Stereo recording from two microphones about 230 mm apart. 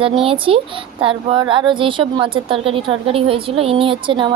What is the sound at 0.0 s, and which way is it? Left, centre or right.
A woman's voice, right.